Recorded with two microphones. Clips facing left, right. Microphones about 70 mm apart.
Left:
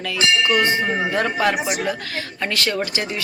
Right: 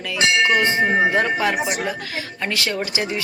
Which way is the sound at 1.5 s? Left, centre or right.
Centre.